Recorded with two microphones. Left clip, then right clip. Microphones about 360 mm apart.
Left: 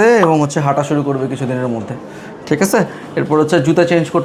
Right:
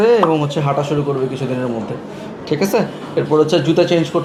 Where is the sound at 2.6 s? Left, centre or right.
Left.